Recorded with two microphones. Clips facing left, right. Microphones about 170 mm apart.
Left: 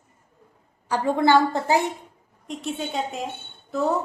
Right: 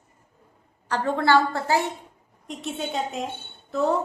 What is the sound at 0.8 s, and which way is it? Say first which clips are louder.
A woman's voice: left 2 dB; 10° left (ahead or behind).